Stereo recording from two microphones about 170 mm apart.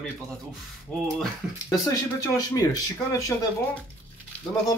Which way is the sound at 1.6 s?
20° left (ahead or behind).